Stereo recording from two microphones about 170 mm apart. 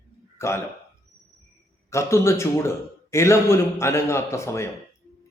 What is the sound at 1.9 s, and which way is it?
A man's voice, 15° left (ahead or behind).